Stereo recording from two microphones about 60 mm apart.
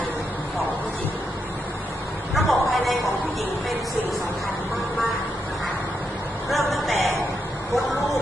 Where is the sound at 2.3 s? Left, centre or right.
Centre.